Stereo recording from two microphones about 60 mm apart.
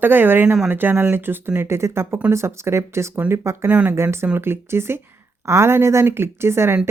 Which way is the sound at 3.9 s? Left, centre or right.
Right.